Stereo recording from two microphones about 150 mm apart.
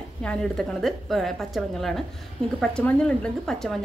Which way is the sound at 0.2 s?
5° left (ahead or behind).